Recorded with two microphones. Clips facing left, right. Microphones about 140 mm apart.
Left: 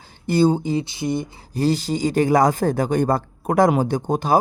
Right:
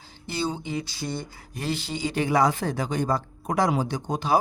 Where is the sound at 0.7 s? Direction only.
25° left (ahead or behind).